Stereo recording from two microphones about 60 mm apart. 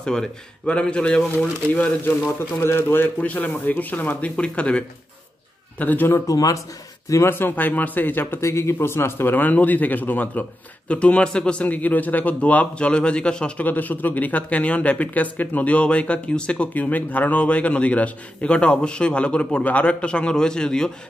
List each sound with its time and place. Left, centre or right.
0.0 s speech: centre
1.7 s speech: left
2.6 s speech: left
3.2 s speech: left
5.8 s speech: left
6.1 s speech: left
7.2 s speech: left
8.4 s a man's voice: left
9.3 s speech: left
13.7 s speech: left; by 20.9 s centre